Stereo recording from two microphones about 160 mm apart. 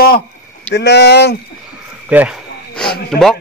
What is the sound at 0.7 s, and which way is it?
Speech, 90° left.